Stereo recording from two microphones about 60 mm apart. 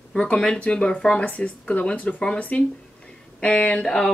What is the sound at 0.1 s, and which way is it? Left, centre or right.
Speech, centre.